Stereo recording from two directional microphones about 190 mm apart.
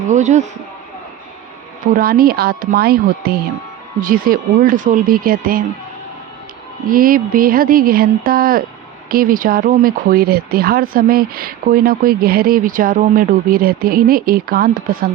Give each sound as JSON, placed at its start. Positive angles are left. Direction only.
{"t": 0.1, "sound": "speech", "side_deg": -40}
{"t": 2.0, "sound": "speech", "side_deg": -50}
{"t": 6.8, "sound": "speech", "side_deg": -50}